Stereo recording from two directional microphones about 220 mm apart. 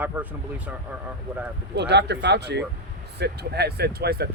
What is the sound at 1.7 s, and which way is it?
Speech, 50° right (ahead or behind).